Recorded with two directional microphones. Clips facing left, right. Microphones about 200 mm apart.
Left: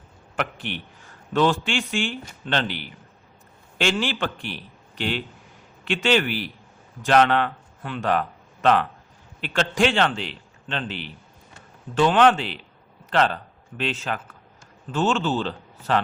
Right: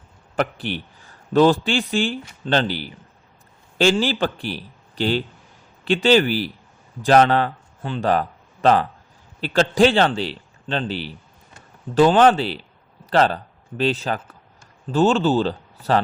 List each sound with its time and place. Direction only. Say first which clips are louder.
0.3 s a man's voice: right 5 dB; 35° right (ahead or behind)